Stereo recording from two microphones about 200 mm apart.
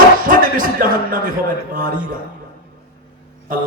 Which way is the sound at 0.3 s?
45° right (ahead or behind).